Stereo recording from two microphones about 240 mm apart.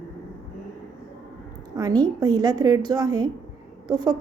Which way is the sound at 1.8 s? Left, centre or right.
Centre.